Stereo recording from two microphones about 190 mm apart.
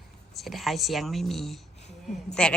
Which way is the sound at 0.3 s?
Centre (ahead or behind).